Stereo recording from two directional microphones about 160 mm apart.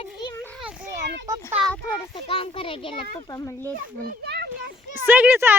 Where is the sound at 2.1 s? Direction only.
35° left (ahead or behind).